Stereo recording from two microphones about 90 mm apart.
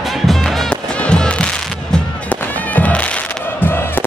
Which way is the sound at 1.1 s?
10° left (ahead or behind).